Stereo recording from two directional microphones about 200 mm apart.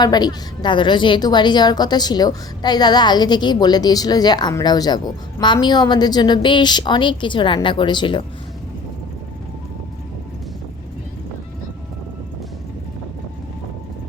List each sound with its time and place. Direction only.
0.0 s a woman's voice: 20° left (ahead or behind)